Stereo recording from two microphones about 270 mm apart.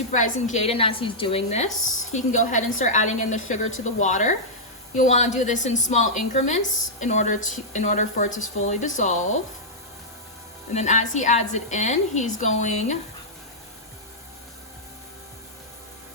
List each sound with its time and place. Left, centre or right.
0.1 s a woman's voice: left
10.8 s a woman's voice: left